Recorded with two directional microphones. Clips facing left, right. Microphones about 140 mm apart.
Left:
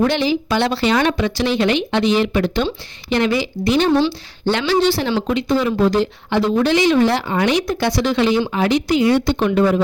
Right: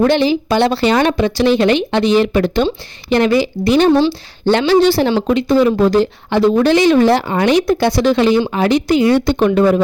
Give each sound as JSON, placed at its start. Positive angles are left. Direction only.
{"t": 0.0, "sound": "a woman's voice", "side_deg": -40}